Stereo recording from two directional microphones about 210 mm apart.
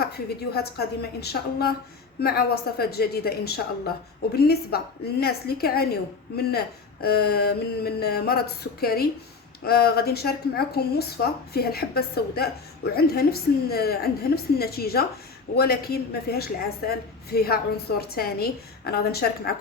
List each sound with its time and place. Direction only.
0.0 s speech: 50° left (ahead or behind)